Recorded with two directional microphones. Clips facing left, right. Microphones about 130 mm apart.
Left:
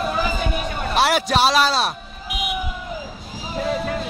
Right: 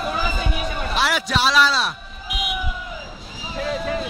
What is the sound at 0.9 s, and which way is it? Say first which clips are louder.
Speech: left 5 dB; 45° left (ahead or behind).